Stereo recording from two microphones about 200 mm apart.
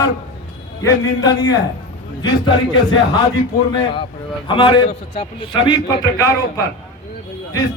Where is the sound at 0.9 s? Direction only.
20° left (ahead or behind).